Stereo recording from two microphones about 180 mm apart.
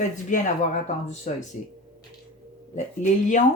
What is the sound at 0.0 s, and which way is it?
Speech, 45° left (ahead or behind).